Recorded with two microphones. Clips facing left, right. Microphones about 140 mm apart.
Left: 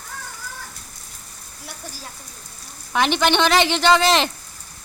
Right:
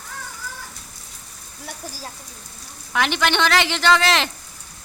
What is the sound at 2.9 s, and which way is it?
Speech, 20° left (ahead or behind).